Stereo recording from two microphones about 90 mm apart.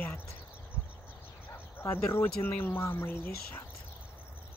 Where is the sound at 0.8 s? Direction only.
25° left (ahead or behind).